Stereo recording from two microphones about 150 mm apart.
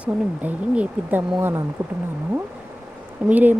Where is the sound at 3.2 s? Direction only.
10° right (ahead or behind).